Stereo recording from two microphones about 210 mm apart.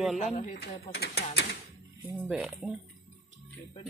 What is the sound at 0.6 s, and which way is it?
Speech, 50° left (ahead or behind).